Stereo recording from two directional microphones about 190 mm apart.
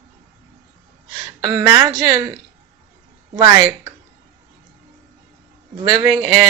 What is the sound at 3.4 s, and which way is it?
Speech, 15° right (ahead or behind).